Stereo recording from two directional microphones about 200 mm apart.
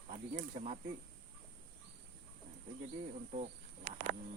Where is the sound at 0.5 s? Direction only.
35° right (ahead or behind).